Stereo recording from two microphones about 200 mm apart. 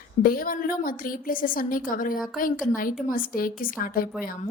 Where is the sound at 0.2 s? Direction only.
45° left (ahead or behind).